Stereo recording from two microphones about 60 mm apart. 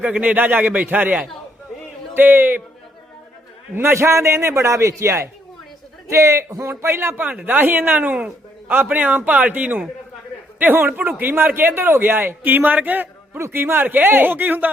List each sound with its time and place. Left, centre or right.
0.0 s a man's voice: right
2.1 s a man's voice: right
3.8 s a man's voice: right
7.2 s a man's voice: right
13.4 s a man's voice: right